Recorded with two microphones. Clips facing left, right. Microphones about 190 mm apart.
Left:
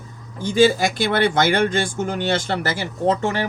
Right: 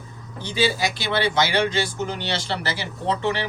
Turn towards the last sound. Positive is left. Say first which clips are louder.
# left 4 dB
turn(degrees=45)  # may be behind; listen again after turning